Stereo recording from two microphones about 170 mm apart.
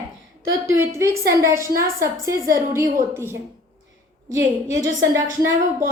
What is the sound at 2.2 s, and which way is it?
Speech, 20° right (ahead or behind).